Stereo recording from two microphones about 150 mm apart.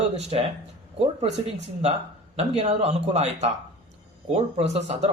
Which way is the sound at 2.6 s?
45° right (ahead or behind).